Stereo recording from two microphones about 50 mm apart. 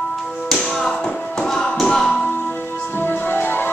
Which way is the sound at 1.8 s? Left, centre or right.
Centre.